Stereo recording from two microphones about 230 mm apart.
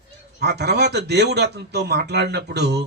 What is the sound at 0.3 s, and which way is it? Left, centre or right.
A man's voice, right.